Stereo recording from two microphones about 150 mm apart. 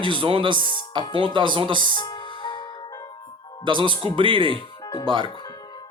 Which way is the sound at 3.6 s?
35° right (ahead or behind).